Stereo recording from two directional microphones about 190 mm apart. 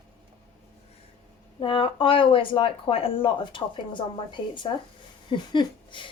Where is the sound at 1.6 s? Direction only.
30° left (ahead or behind).